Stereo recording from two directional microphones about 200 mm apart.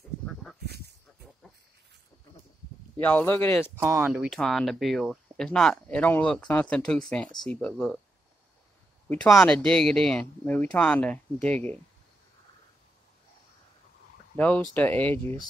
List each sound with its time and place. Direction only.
0.7 s a sound: 55° right (ahead or behind)
3.0 s speech: 10° left (ahead or behind)
3.7 s speech: 10° right (ahead or behind)
9.1 s speech: 10° left (ahead or behind)
14.3 s speech: 5° left (ahead or behind)